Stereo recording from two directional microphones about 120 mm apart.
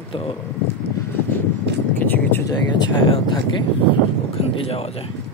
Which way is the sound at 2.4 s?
40° left (ahead or behind).